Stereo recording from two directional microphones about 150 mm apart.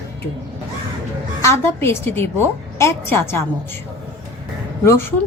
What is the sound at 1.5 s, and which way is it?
A woman's voice, 15° left (ahead or behind).